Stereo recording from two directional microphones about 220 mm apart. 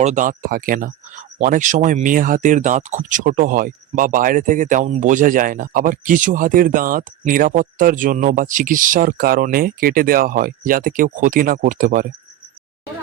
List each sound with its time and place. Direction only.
0.0 s speech: 35° right (ahead or behind)